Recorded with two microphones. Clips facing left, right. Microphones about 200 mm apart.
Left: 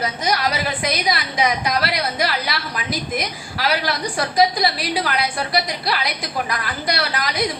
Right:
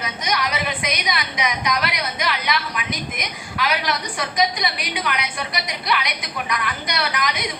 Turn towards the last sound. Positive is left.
turn(degrees=35)  # may be behind; listen again after turning